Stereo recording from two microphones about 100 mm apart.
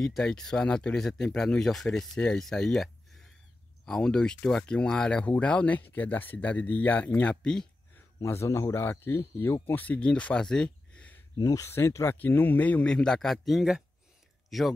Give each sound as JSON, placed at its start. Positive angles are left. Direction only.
{"t": 0.0, "sound": "speech", "side_deg": 5}
{"t": 8.2, "sound": "a man's voice", "side_deg": 30}
{"t": 11.3, "sound": "speech", "side_deg": 35}